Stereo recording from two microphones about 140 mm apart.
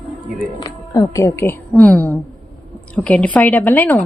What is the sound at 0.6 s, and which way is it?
Speech, 30° left (ahead or behind).